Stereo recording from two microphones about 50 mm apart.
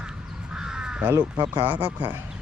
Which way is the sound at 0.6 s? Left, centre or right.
Centre.